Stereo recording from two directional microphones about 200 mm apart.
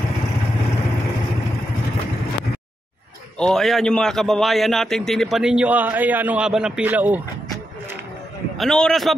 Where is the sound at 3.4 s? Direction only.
Centre (ahead or behind).